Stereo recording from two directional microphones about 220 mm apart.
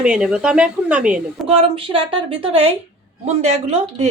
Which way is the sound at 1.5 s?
25° right (ahead or behind).